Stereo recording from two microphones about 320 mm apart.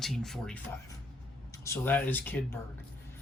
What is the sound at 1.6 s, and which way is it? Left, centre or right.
Speech, centre.